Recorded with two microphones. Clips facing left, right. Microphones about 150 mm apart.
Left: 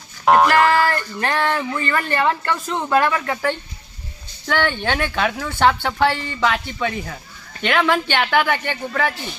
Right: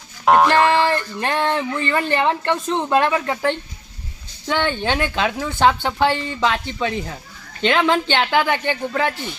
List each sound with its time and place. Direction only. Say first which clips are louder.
0.3 s music: even; centre (ahead or behind)
0.7 s a sound: right 1 dB; 15° right (ahead or behind)
1.2 s speech: left 1 dB; 20° right (ahead or behind)